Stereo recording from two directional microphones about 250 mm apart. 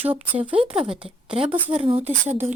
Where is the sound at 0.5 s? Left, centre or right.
Right.